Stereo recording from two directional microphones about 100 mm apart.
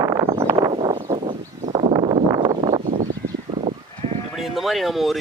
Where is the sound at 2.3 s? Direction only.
40° right (ahead or behind).